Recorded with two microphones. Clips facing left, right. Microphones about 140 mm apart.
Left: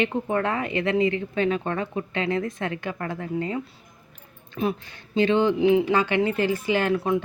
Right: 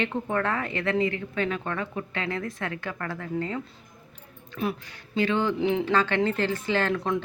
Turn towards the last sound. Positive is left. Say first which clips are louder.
# left 3 dB
turn(degrees=5)  # may be behind; listen again after turning